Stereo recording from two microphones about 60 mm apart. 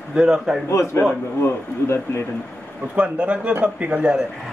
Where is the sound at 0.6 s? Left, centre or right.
Left.